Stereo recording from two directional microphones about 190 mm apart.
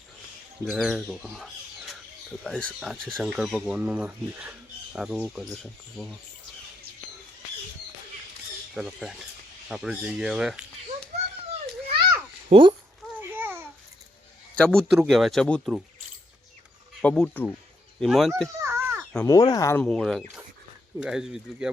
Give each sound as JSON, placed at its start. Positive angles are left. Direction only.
{"t": 0.6, "sound": "speech", "side_deg": 0}
{"t": 8.7, "sound": "speech", "side_deg": 0}
{"t": 12.5, "sound": "speech", "side_deg": -30}
{"t": 13.1, "sound": "babbling", "side_deg": -10}
{"t": 14.6, "sound": "speech", "side_deg": 5}
{"t": 17.0, "sound": "speech", "side_deg": 5}
{"t": 18.4, "sound": "a sound", "side_deg": -15}
{"t": 19.2, "sound": "speech", "side_deg": 20}